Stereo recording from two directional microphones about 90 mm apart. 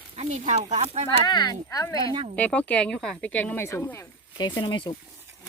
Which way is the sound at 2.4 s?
15° left (ahead or behind).